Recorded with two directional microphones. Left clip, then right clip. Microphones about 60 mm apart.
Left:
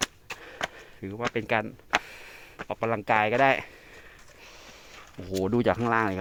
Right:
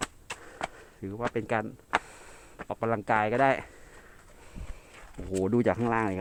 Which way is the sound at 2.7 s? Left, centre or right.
Centre.